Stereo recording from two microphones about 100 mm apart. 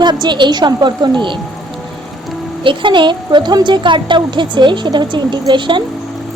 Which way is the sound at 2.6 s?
55° right (ahead or behind).